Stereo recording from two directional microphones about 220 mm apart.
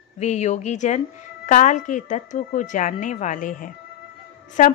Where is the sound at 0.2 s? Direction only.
30° left (ahead or behind).